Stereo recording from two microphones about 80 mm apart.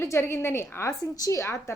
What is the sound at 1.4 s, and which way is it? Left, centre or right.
Speech, left.